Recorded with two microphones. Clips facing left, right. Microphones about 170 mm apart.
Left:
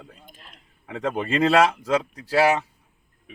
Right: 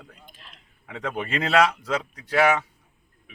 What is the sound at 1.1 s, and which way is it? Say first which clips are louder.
Speech: left 4 dB; 35° left (ahead or behind).